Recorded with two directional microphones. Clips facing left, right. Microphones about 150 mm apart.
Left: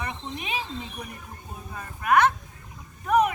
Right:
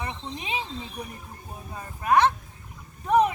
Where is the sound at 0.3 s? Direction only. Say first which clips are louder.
Even; 25° right (ahead or behind).